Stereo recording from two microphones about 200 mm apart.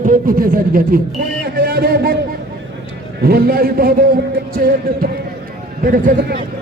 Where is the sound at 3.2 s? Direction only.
50° right (ahead or behind).